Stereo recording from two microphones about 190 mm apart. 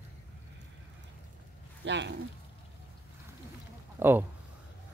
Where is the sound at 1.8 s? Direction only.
70° right (ahead or behind).